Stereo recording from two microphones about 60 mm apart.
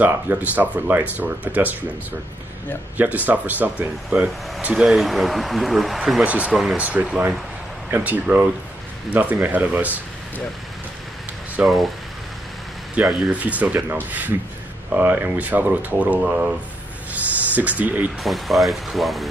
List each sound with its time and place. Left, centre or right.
0.0 s speech: right
3.0 s speech: right
4.8 s speech: centre
6.2 s speech: right
6.5 s speech: centre
6.8 s speech: right
11.6 s speech: centre
12.9 s speech: right
18.2 s speech: centre